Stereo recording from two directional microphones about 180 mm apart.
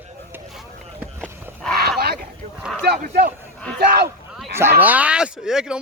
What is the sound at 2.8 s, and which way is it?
Speech, 60° right (ahead or behind).